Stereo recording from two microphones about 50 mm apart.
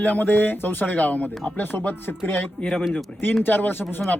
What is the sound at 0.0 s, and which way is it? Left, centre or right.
Speech, left.